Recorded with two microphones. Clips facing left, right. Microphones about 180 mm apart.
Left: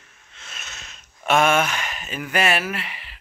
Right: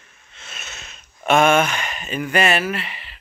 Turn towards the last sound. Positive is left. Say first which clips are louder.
# right 3 dB
turn(degrees=10)  # may be behind; listen again after turning